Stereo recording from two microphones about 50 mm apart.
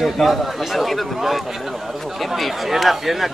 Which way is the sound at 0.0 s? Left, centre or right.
Centre.